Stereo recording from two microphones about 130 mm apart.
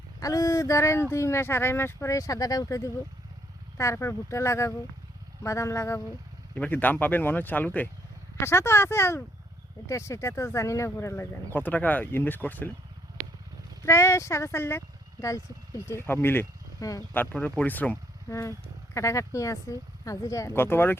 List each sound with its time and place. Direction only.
0.2 s speech: 25° left (ahead or behind)
13.8 s speech: 20° left (ahead or behind)
17.2 s speech: 10° left (ahead or behind)